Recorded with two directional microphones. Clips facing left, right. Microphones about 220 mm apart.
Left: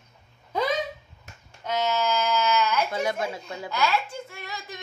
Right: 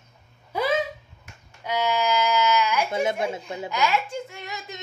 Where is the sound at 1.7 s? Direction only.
10° right (ahead or behind).